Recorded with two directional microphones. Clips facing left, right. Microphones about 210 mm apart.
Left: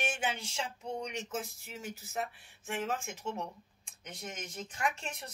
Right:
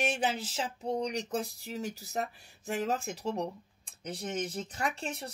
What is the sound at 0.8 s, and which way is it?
A man's voice, 35° right (ahead or behind).